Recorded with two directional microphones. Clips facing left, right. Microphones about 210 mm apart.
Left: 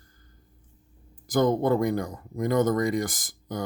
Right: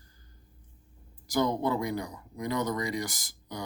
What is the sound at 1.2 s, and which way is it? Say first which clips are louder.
Speech: left 5 dB; 50° left (ahead or behind).